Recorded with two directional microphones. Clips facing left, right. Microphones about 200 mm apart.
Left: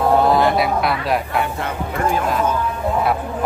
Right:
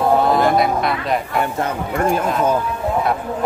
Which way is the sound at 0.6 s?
5° left (ahead or behind).